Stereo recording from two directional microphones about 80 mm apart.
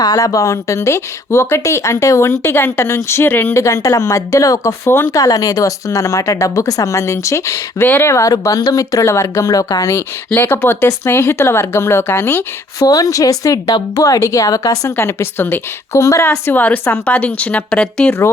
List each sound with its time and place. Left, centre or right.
0.0 s speech: left
3.5 s speech: left
7.9 s speech: left
8.1 s speech: left
10.3 s speech: left
12.8 s speech: left
14.9 s speech: left
15.9 s speech: left
16.5 s a woman's voice: left